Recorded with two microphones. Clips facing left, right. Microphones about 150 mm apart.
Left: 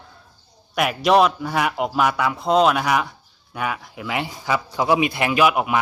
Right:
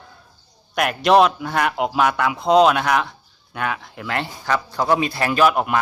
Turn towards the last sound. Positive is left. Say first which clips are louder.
# right 1 dB
turn(degrees=10)  # may be behind; listen again after turning